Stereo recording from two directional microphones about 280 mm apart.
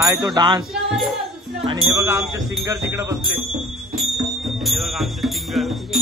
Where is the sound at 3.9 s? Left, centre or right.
Centre.